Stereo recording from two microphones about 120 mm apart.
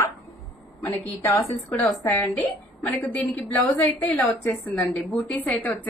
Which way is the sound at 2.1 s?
15° left (ahead or behind).